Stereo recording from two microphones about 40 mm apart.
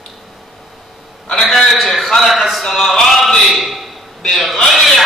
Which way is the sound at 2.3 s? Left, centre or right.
Centre.